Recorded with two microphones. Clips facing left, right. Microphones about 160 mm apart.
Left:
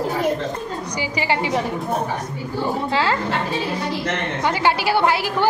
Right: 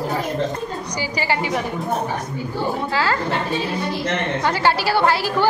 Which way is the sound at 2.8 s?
25° left (ahead or behind).